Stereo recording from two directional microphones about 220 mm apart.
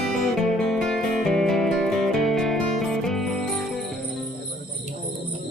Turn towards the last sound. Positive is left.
turn(degrees=0)  # may be behind; listen again after turning